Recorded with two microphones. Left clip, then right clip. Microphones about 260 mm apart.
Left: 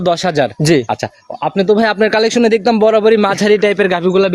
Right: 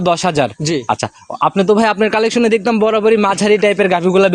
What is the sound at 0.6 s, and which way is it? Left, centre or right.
Speech, left.